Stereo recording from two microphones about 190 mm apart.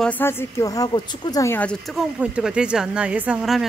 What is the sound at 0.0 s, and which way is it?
A woman's voice, 10° left (ahead or behind).